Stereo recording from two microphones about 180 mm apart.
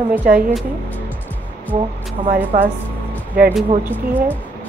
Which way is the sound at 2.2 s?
45° right (ahead or behind).